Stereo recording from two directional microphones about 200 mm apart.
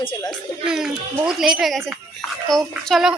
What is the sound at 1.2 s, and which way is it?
A woman's voice, centre (ahead or behind).